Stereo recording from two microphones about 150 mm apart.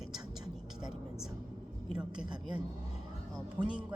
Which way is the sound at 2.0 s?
5° right (ahead or behind).